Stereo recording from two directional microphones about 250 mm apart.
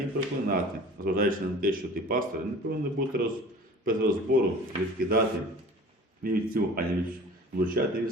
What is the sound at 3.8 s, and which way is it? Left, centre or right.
Speech, right.